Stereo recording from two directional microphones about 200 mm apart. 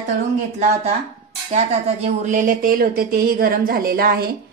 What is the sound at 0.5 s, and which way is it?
A woman's voice, 35° right (ahead or behind).